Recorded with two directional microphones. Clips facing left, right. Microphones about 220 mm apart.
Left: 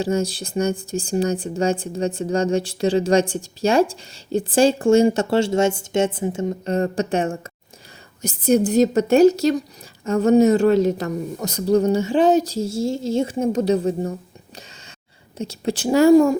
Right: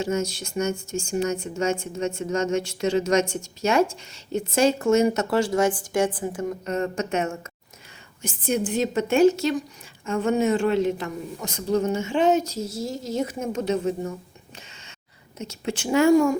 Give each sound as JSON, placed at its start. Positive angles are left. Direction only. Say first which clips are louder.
{"t": 0.0, "sound": "speech", "louder": "left 4 dB", "side_deg": 35}